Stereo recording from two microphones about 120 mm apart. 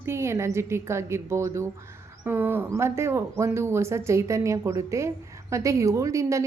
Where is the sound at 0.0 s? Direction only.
25° right (ahead or behind).